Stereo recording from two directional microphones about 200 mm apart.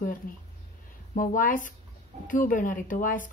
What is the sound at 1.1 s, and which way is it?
Speech, 40° left (ahead or behind).